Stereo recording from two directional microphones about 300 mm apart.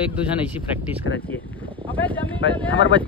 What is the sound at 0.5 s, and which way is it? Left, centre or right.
Speech, centre.